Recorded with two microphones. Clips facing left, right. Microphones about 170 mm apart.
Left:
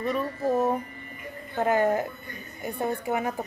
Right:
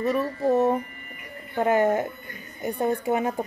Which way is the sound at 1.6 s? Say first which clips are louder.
Right 2 dB; 25° right (ahead or behind).